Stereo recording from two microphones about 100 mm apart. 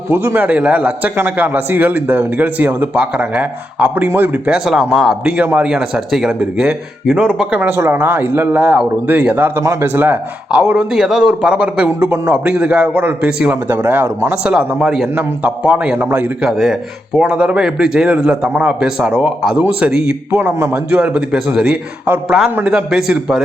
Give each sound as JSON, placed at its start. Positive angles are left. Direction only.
{"t": 0.1, "sound": "speech", "side_deg": -25}
{"t": 0.4, "sound": "a man's voice", "side_deg": -15}
{"t": 5.4, "sound": "a man's voice", "side_deg": -15}
{"t": 11.9, "sound": "speech", "side_deg": -20}
{"t": 12.3, "sound": "a man's voice", "side_deg": -10}
{"t": 14.3, "sound": "a man's voice", "side_deg": -10}